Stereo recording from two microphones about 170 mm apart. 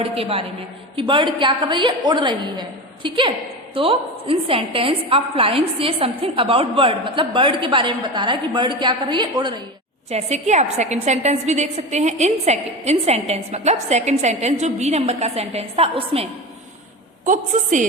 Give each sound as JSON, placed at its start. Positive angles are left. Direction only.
{"t": 0.0, "sound": "a woman's voice", "side_deg": -35}
{"t": 10.1, "sound": "a woman's voice", "side_deg": -40}
{"t": 17.2, "sound": "a woman's voice", "side_deg": -50}